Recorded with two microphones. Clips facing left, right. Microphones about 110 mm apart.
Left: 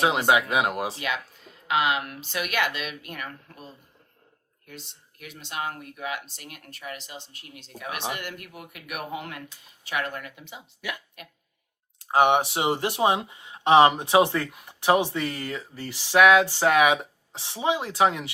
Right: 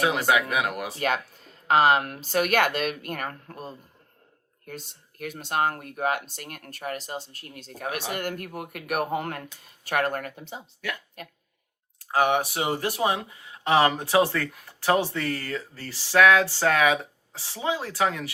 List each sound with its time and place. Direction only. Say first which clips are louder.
0.0 s speech: left 1 dB; 25° left (ahead or behind)
0.9 s speech: right 5 dB; 40° right (ahead or behind)
10.8 s speech: even; 15° left (ahead or behind)